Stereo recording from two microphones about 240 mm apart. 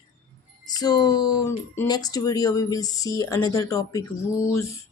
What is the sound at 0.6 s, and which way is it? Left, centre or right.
Speech, centre.